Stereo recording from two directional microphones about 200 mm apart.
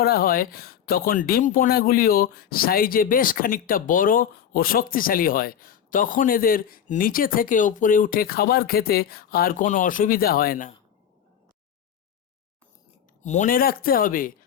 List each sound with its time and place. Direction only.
0.0 s speech: 50° left (ahead or behind)
13.2 s speech: 35° left (ahead or behind)